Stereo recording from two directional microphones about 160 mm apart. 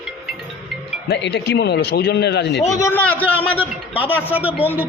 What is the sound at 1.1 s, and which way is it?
A man's voice, 90° left.